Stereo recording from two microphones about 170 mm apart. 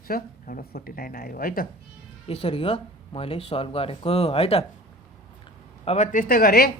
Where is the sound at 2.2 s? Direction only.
35° left (ahead or behind).